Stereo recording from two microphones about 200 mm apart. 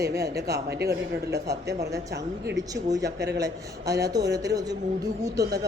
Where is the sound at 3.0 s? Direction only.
55° right (ahead or behind).